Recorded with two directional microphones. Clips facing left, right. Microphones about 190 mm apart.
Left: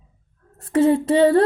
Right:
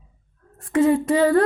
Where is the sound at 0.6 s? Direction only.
30° left (ahead or behind).